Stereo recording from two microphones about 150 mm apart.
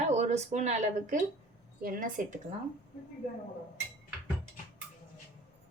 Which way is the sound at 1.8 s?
70° right (ahead or behind).